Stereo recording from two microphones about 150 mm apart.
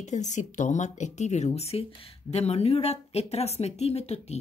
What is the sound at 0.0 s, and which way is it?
Speech, 50° left (ahead or behind).